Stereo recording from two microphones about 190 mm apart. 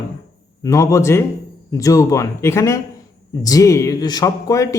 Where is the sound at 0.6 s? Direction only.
15° left (ahead or behind).